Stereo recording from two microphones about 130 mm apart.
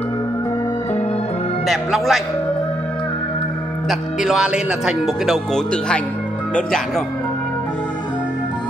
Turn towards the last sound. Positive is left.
turn(degrees=5)  # may be behind; listen again after turning